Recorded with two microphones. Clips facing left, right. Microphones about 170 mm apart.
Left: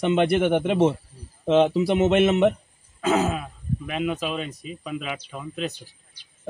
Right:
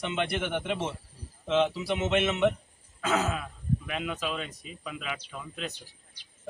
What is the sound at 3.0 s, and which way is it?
Speech, 20° left (ahead or behind).